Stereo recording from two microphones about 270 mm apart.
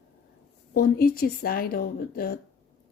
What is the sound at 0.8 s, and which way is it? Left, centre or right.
A woman's voice, left.